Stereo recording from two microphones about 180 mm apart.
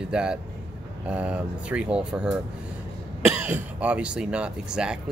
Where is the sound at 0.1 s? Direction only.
5° right (ahead or behind).